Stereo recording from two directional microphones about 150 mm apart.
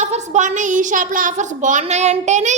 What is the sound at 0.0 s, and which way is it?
A woman's voice, 55° right (ahead or behind).